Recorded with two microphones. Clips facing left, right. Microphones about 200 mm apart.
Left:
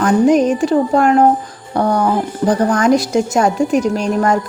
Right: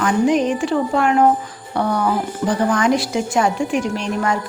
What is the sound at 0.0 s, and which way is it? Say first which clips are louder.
A woman's voice: left 5 dB; 40° left (ahead or behind).